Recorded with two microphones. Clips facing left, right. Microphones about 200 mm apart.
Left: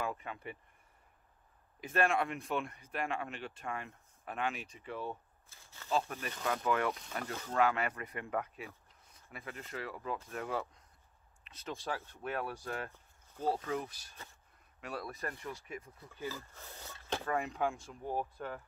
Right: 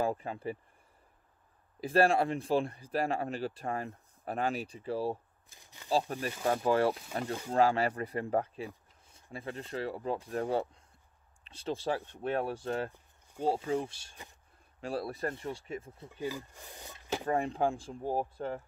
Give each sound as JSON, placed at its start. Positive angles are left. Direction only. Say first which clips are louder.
{"t": 0.0, "sound": "speech", "louder": "right 7 dB", "side_deg": -35}
{"t": 1.8, "sound": "speech", "louder": "right 6 dB", "side_deg": -35}
{"t": 5.5, "sound": "speech", "louder": "right 1 dB", "side_deg": -15}
{"t": 5.9, "sound": "speech", "louder": "right 4 dB", "side_deg": -35}
{"t": 16.1, "sound": "speech", "louder": "right 5 dB", "side_deg": -15}
{"t": 17.3, "sound": "speech", "louder": "right 5 dB", "side_deg": -30}